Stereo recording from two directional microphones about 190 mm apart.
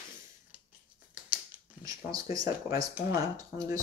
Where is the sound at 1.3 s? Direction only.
15° right (ahead or behind).